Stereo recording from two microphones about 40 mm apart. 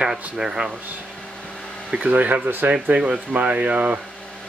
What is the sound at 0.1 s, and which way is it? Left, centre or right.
Speech, centre.